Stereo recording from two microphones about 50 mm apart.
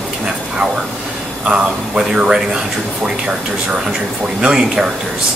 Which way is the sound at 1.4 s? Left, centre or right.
Right.